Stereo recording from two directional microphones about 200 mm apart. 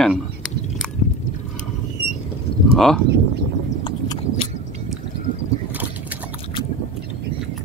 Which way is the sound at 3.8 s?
25° left (ahead or behind).